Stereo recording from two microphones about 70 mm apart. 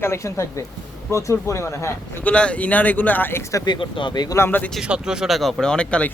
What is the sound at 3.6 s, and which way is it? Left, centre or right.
Speech, left.